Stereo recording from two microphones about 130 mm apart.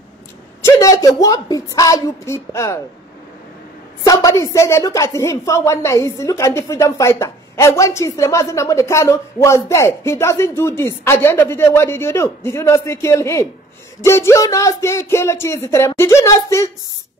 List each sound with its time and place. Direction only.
0.6 s a woman's voice: 20° left (ahead or behind)
4.0 s a woman's voice: 25° left (ahead or behind)